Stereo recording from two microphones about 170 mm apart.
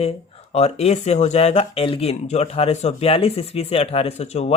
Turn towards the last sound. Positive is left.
turn(degrees=40)  # may be behind; listen again after turning